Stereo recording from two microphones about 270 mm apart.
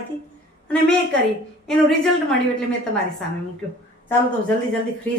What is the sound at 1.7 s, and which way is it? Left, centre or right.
Speech, centre.